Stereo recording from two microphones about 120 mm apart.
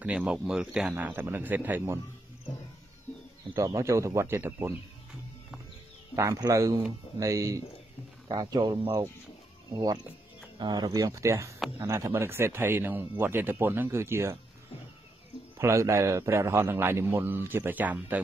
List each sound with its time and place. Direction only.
0.0 s speech: 10° right (ahead or behind)
0.9 s speech: 20° right (ahead or behind)
3.5 s speech: 25° right (ahead or behind)
6.1 s speech: 25° right (ahead or behind)
15.6 s speech: 25° right (ahead or behind)